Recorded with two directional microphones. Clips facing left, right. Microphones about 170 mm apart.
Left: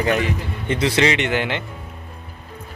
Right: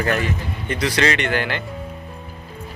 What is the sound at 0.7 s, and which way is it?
Speech, 25° left (ahead or behind).